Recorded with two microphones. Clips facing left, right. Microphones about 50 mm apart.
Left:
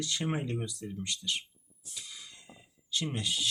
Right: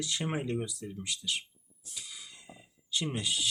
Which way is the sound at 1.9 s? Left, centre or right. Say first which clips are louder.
Even; centre.